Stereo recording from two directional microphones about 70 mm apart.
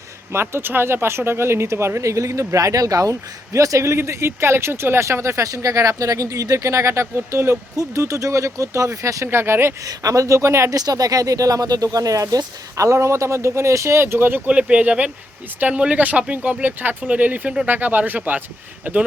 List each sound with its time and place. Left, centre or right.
0.3 s speech: right
9.3 s speech: right
9.8 s speech: right
10.8 s speech: right
14.5 s speech: centre